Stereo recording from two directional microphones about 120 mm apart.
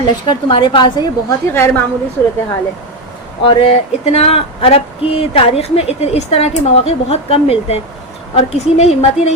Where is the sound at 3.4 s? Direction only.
45° left (ahead or behind).